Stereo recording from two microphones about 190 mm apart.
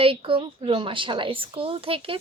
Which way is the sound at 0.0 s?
30° right (ahead or behind).